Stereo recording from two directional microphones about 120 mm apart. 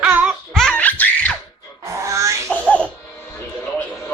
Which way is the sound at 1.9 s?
25° right (ahead or behind).